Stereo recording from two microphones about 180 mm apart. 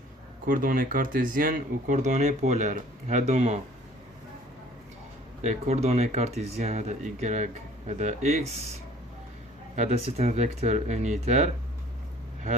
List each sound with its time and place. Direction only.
0.4 s speech: 50° right (ahead or behind)
5.4 s speech: 40° right (ahead or behind)
9.7 s speech: 40° right (ahead or behind)